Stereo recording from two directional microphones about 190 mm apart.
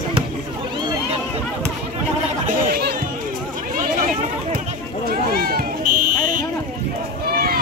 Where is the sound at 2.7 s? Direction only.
50° right (ahead or behind).